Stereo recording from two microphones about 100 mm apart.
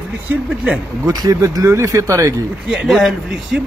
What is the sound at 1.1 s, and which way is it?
Speech, 40° right (ahead or behind).